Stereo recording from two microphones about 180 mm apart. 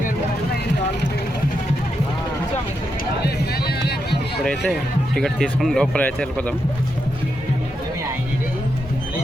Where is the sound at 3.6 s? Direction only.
65° left (ahead or behind).